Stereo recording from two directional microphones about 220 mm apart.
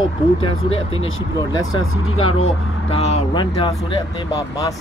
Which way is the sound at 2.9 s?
30° left (ahead or behind).